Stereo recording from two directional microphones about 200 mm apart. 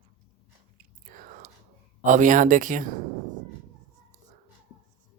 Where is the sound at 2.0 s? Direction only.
40° right (ahead or behind).